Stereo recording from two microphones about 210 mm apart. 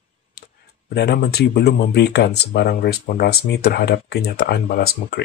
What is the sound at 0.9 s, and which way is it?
Speech, 50° left (ahead or behind).